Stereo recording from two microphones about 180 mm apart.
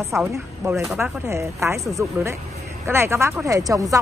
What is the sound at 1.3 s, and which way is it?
Speech, 15° right (ahead or behind).